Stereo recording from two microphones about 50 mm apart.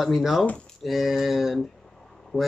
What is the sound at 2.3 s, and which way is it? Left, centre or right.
Speech, centre.